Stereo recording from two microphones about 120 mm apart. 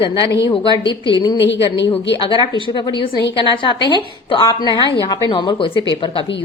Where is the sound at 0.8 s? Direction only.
40° left (ahead or behind).